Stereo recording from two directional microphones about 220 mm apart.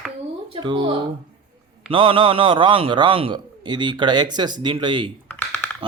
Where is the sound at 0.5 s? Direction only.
20° right (ahead or behind).